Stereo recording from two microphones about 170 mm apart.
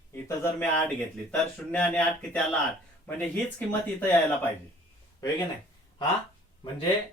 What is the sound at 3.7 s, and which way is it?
Speech, 10° left (ahead or behind).